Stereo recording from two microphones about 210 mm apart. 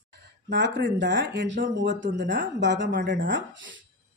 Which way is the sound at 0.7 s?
60° right (ahead or behind).